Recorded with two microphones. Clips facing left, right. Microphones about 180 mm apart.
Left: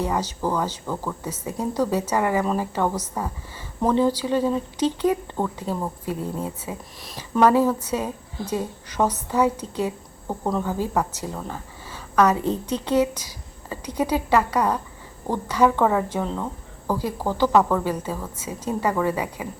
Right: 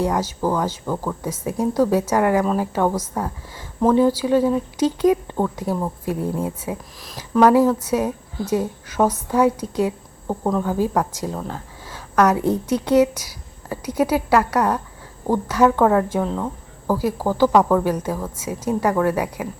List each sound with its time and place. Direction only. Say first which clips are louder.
0.0 s a woman's voice: right 4 dB; 10° right (ahead or behind)
1.2 s speech: right 5 dB; 90° right
1.8 s a woman's voice: right 4 dB; 10° right (ahead or behind)